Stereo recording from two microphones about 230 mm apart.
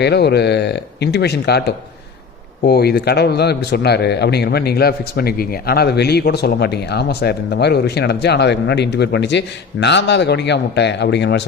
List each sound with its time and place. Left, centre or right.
0.0 s speech: left